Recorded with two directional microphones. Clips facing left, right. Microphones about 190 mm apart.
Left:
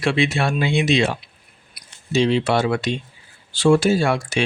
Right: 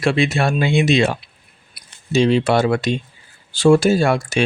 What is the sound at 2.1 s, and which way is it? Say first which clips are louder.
Speech: right 3 dB; 45° right (ahead or behind).